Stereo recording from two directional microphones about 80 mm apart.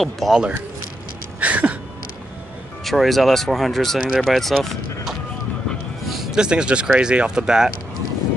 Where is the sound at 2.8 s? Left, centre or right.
Centre.